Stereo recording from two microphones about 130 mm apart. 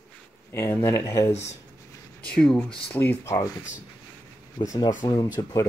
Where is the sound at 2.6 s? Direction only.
45° left (ahead or behind).